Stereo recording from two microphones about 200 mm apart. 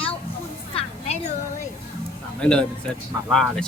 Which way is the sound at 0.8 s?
30° left (ahead or behind).